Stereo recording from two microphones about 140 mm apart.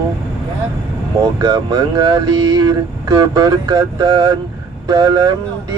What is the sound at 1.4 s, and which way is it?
Speech, 30° right (ahead or behind).